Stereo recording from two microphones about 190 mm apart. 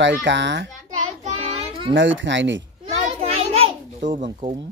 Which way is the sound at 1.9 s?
75° right (ahead or behind).